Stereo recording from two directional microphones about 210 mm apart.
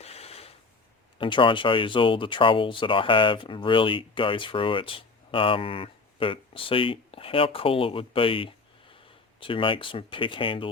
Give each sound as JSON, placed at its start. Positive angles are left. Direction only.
{"t": 0.0, "sound": "mechanisms", "side_deg": 30}
{"t": 1.2, "sound": "speech", "side_deg": 25}